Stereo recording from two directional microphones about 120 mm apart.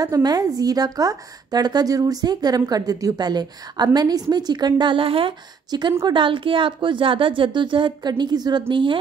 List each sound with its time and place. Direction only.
0.0 s a woman's voice: 30° right (ahead or behind); by 5.3 s 50° right (ahead or behind)
5.7 s a woman's voice: 35° right (ahead or behind)